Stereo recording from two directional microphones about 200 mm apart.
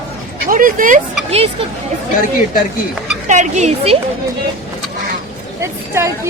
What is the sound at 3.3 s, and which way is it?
Speech, 35° right (ahead or behind).